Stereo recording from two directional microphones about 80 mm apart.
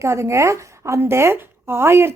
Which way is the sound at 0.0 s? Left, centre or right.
Right.